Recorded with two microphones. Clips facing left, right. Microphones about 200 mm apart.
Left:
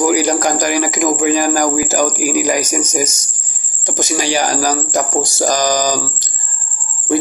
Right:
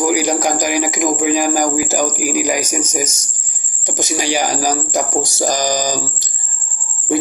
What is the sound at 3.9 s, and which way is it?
Speech, 15° right (ahead or behind).